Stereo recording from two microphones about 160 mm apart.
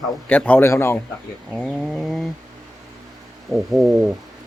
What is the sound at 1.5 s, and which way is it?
Speech, centre (ahead or behind).